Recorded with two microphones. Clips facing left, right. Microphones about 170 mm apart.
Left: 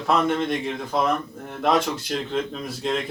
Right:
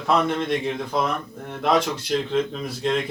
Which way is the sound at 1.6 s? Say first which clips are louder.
Even; centre (ahead or behind).